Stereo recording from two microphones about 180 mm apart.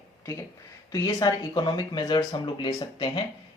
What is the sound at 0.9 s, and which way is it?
Speech, 20° left (ahead or behind).